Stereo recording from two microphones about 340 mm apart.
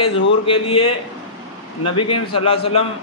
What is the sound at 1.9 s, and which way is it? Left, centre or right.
Speech, centre.